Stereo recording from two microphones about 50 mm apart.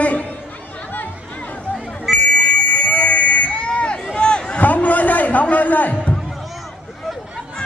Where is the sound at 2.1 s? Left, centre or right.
Left.